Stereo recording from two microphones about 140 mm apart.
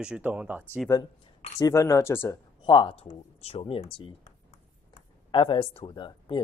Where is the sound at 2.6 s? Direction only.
35° left (ahead or behind).